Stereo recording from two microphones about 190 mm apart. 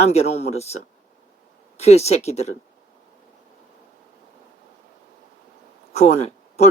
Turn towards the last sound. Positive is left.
turn(degrees=35)  # may be behind; listen again after turning